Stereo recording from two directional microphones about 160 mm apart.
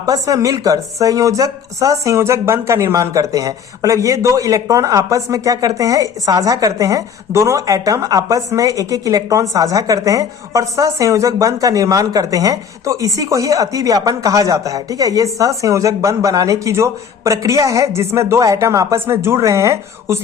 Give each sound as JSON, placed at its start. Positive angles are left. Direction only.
{"t": 0.0, "sound": "speech", "side_deg": -20}